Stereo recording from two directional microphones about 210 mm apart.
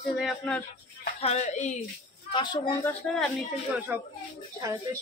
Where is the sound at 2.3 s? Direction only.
25° left (ahead or behind).